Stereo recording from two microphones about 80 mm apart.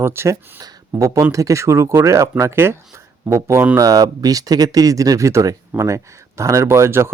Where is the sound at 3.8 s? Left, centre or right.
Right.